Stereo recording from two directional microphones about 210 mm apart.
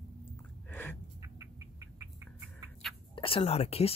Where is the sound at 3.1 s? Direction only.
25° left (ahead or behind).